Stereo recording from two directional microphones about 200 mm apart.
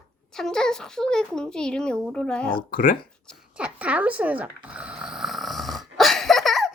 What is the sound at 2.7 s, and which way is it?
Speech, 45° left (ahead or behind).